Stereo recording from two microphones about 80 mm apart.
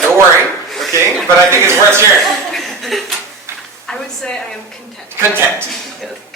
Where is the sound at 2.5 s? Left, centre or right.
Centre.